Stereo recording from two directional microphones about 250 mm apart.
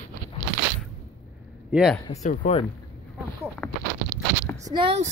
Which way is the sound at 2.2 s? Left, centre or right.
Left.